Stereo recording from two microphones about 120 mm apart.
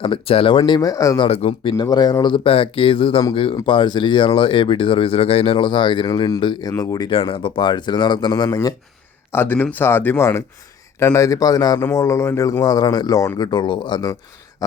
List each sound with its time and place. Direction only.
0.0 s speech: 50° left (ahead or behind); by 1.2 s 30° left (ahead or behind)
1.2 s speech: 55° left (ahead or behind)
1.7 s speech: 35° left (ahead or behind)
7.1 s speech: 45° left (ahead or behind)
8.4 s speech: 25° left (ahead or behind)